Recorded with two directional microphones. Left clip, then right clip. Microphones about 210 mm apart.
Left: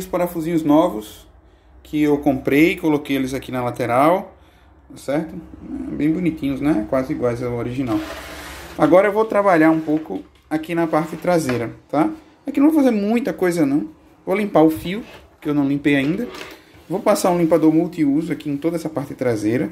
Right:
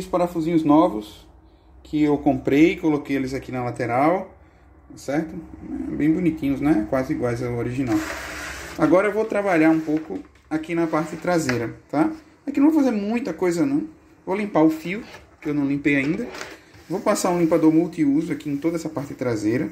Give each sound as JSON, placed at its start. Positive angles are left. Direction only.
{"t": 0.4, "sound": "speech", "side_deg": -5}
{"t": 5.9, "sound": "speech", "side_deg": -5}